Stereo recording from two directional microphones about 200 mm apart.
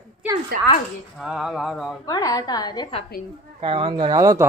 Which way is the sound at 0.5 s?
45° right (ahead or behind).